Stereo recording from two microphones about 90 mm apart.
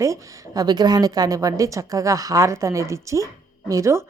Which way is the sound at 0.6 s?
50° right (ahead or behind).